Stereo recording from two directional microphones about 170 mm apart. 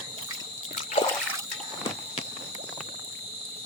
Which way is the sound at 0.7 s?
40° left (ahead or behind).